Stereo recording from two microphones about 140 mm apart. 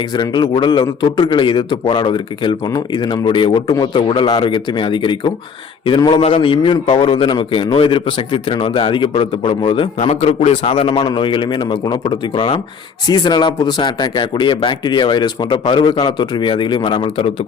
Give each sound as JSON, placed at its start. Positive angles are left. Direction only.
{"t": 0.1, "sound": "a man's voice", "side_deg": 30}
{"t": 10.1, "sound": "a man's voice", "side_deg": 50}